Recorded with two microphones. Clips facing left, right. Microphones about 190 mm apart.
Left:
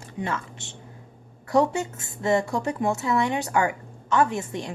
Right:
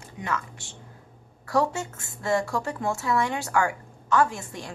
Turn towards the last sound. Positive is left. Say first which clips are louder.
# left 1 dB
turn(degrees=20)  # may be behind; listen again after turning